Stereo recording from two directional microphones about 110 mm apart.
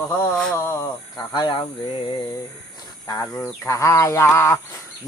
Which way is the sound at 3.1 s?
30° left (ahead or behind).